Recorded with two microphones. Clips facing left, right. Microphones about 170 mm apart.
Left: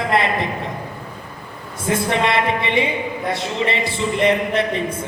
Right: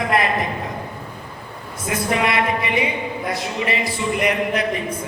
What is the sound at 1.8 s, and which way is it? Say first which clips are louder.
A woman's voice: left 2 dB; 25° left (ahead or behind).